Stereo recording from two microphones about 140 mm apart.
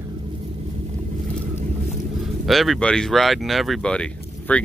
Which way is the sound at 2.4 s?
Centre (ahead or behind).